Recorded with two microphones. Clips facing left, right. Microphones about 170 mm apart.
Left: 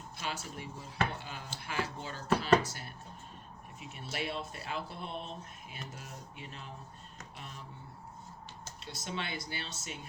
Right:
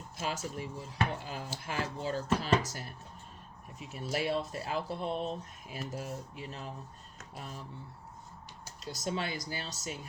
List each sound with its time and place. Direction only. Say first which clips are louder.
0.2 s speech: right 4 dB; 40° right (ahead or behind)
8.8 s speech: right 5 dB; 40° right (ahead or behind)